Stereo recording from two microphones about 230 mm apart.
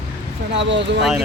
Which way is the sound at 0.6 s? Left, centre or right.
Right.